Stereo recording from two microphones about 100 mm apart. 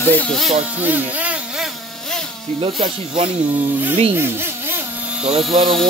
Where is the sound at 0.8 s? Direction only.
20° right (ahead or behind).